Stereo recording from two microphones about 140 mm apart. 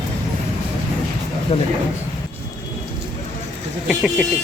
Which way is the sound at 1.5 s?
50° left (ahead or behind).